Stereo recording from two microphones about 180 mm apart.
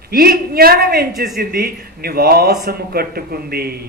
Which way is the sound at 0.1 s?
55° right (ahead or behind).